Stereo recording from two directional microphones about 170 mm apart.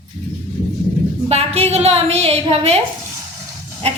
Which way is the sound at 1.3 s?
40° right (ahead or behind).